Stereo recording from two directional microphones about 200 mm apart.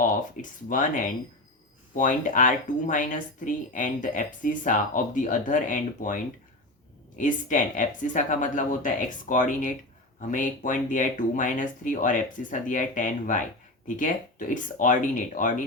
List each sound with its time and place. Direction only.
0.4 s speech: 40° left (ahead or behind)
7.2 s speech: 40° left (ahead or behind)